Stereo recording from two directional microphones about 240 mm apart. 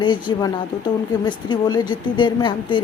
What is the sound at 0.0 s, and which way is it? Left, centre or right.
A woman's voice, centre.